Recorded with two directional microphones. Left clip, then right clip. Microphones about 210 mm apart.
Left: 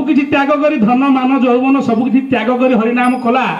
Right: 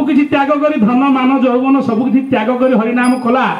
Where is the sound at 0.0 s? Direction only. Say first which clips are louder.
Even; 45° left (ahead or behind).